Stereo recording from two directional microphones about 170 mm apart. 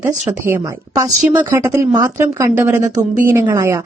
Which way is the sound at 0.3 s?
15° right (ahead or behind).